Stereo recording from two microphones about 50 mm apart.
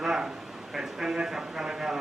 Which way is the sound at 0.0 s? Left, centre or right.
Centre.